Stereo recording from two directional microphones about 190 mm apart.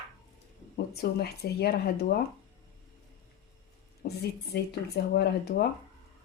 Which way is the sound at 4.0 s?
55° left (ahead or behind).